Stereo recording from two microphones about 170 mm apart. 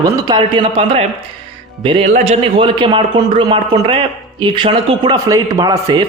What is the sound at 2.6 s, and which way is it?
A man's voice, 30° right (ahead or behind).